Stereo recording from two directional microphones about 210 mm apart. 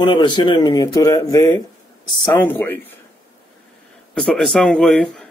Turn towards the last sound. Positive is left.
turn(degrees=5)  # may be behind; listen again after turning